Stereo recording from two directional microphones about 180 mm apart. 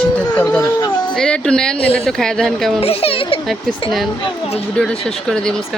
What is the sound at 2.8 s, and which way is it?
Speech, 30° left (ahead or behind).